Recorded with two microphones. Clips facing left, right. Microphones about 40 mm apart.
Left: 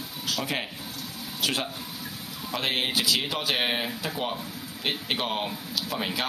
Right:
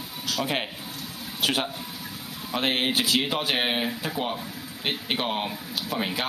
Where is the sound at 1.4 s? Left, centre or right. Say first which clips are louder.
Right 3 dB; right.